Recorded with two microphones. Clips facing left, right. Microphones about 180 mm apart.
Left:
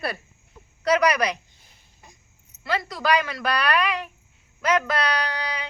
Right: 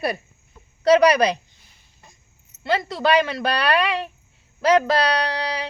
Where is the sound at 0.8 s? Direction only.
30° right (ahead or behind).